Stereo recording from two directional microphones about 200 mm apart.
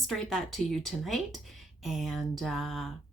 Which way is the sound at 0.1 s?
Centre (ahead or behind).